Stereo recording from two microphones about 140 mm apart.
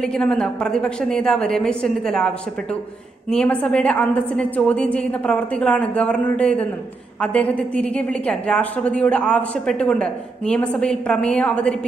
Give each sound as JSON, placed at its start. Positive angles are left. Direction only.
{"t": 0.0, "sound": "a woman's voice", "side_deg": 5}